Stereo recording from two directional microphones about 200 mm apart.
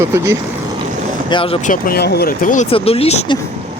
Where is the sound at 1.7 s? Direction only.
50° left (ahead or behind); by 3.4 s 30° left (ahead or behind).